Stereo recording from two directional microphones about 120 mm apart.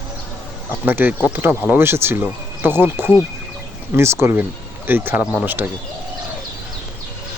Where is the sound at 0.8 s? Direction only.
15° right (ahead or behind).